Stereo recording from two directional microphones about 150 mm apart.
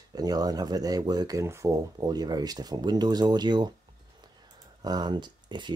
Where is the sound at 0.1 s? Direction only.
25° right (ahead or behind).